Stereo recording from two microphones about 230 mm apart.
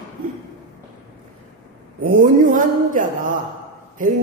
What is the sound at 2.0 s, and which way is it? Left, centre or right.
Speech, right.